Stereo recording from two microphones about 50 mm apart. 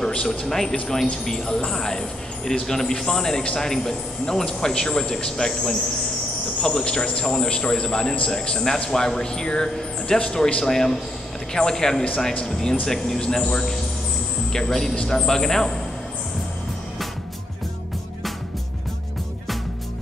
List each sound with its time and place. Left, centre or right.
0.0 s a man's voice: centre